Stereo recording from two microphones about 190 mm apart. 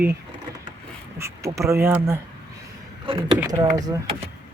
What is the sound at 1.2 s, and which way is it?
Speech, 15° right (ahead or behind).